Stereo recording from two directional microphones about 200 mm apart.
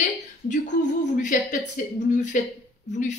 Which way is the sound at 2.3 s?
40° left (ahead or behind).